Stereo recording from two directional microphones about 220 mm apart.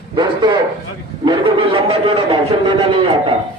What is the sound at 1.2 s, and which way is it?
A man's voice, 25° right (ahead or behind).